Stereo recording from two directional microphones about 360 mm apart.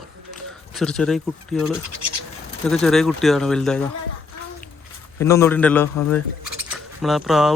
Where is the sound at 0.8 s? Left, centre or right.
Centre.